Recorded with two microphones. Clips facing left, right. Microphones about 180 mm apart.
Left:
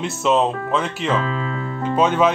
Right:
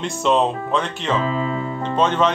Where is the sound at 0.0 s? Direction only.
5° left (ahead or behind).